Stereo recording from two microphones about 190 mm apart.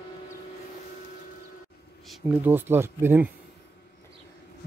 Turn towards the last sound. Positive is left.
turn(degrees=-10)  # may be behind; listen again after turning